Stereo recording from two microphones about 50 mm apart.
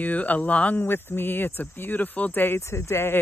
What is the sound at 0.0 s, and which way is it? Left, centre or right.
Speech, left.